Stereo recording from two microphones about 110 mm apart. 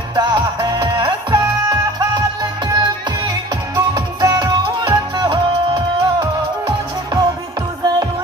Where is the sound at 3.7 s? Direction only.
35° right (ahead or behind).